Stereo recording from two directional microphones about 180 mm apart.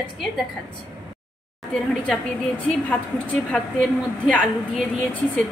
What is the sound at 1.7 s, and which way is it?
A woman's voice, 5° left (ahead or behind).